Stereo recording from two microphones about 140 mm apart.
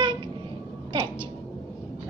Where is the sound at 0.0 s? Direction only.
35° right (ahead or behind).